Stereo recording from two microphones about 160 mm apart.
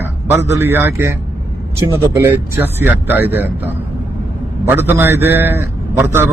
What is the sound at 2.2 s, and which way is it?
A man's voice, 15° right (ahead or behind).